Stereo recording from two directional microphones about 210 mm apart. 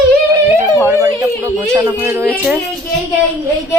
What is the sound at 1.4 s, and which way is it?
A woman's voice, 10° right (ahead or behind).